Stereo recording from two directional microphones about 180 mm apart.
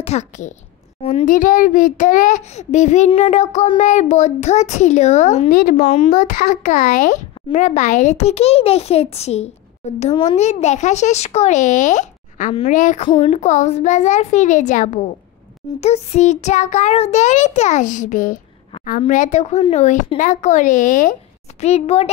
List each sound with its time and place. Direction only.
0.0 s a child's voice: 40° left (ahead or behind)
5.5 s speech: 55° left (ahead or behind)
5.8 s a child's voice: 35° left (ahead or behind)
13.0 s a child's voice: 30° left (ahead or behind)